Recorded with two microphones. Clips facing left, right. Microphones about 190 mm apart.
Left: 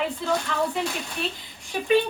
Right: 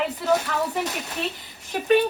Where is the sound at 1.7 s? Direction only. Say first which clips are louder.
Right 2 dB; 40° right (ahead or behind).